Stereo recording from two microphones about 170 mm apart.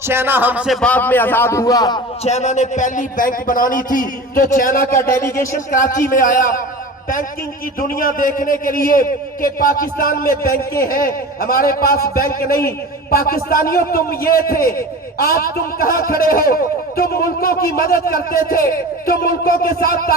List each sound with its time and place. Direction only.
0.1 s speech: 15° right (ahead or behind)
0.8 s a man's voice: 10° left (ahead or behind)
2.2 s a man's voice: 40° left (ahead or behind)
4.9 s a man's voice: 15° left (ahead or behind)
5.2 s a man's voice: 55° left (ahead or behind)
7.8 s a man's voice: 55° left (ahead or behind)